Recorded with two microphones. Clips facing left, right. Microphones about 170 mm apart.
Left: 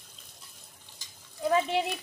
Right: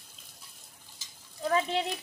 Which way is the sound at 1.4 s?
15° left (ahead or behind).